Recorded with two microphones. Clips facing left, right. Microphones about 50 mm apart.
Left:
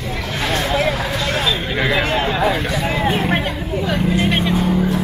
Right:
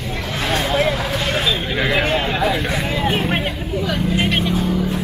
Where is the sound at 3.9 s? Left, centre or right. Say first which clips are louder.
Left 3 dB; centre.